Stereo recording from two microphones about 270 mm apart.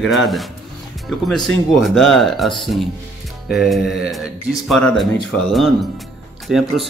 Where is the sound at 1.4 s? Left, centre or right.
Centre.